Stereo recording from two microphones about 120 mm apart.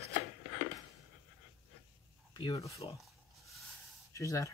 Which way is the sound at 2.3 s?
40° left (ahead or behind).